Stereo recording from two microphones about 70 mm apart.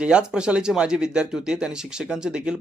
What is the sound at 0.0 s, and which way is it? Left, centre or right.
Speech, centre.